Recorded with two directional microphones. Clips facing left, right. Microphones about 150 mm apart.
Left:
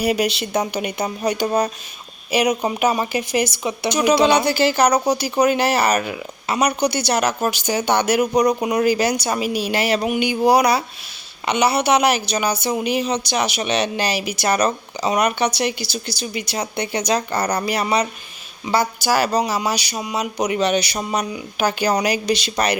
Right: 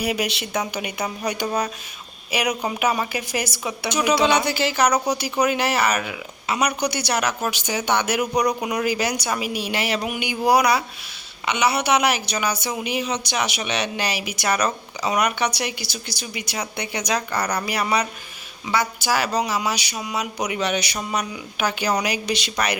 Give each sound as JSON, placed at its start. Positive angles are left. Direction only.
{"t": 0.0, "sound": "a woman's voice", "side_deg": 35}
{"t": 3.8, "sound": "a woman's voice", "side_deg": 35}
{"t": 10.1, "sound": "a woman's voice", "side_deg": 25}